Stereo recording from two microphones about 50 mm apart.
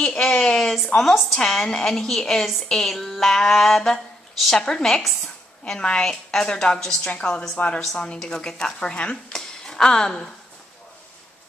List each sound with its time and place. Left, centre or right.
0.0 s a woman's voice: centre
5.8 s a woman's voice: centre